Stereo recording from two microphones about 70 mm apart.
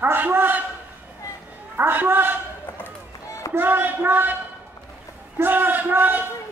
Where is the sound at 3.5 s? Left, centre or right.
Right.